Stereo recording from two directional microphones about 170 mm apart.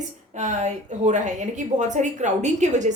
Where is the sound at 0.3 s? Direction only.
45° right (ahead or behind).